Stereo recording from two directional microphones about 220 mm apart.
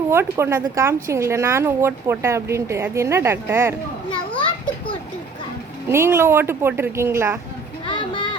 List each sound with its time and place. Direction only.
0.1 s speech: 10° right (ahead or behind)
5.9 s speech: 10° right (ahead or behind)
7.9 s a sound: 20° left (ahead or behind)